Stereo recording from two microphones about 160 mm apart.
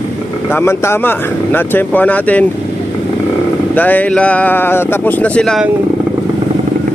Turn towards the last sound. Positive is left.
turn(degrees=5)  # may be behind; listen again after turning